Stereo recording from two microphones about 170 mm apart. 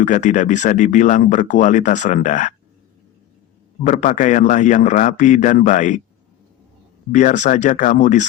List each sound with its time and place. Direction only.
0.0 s speech: 45° left (ahead or behind)
3.8 s speech: 45° left (ahead or behind)
7.1 s speech: 45° left (ahead or behind)